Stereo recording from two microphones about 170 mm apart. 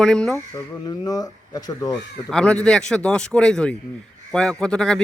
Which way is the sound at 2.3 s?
5° left (ahead or behind).